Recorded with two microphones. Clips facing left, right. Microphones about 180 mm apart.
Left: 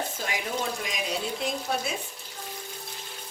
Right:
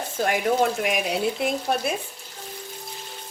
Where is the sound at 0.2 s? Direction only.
55° right (ahead or behind).